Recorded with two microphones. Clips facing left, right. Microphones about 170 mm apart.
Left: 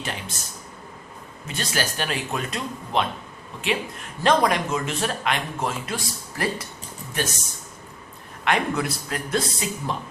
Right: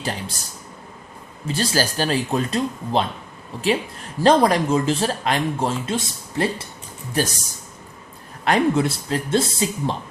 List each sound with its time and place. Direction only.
0.0 s speech: 35° right (ahead or behind)
1.5 s speech: 35° right (ahead or behind)
8.4 s speech: 30° right (ahead or behind)